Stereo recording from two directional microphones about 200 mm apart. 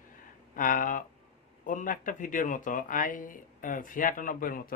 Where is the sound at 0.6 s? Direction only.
40° left (ahead or behind).